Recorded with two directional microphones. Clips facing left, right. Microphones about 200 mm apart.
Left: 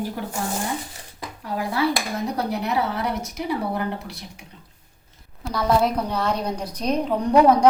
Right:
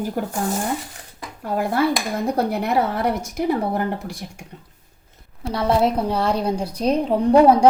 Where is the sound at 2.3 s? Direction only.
50° right (ahead or behind).